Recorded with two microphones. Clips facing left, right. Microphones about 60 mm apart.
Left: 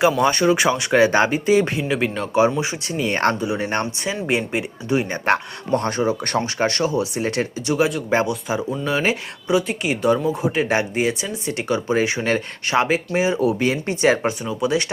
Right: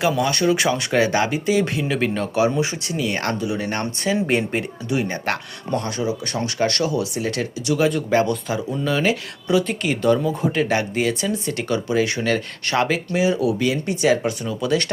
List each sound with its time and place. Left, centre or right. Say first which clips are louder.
0.2 s speech: left 2 dB; left
1.8 s speech: even; centre
2.3 s speech: left 4 dB; left
4.1 s speech: right 2 dB; centre
4.9 s speech: left 4 dB; left
5.7 s speech: left 3 dB; left
6.4 s speech: right 4 dB; left
8.3 s speech: even; centre
13.1 s speech: right 1 dB; left
14.4 s speech: left 1 dB; centre